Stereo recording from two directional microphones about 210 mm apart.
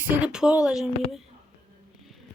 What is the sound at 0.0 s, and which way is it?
Speech, 5° right (ahead or behind).